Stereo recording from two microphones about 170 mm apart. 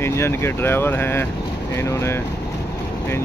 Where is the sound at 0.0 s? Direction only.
15° left (ahead or behind).